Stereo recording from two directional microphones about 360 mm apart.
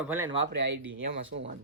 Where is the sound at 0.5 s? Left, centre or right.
Right.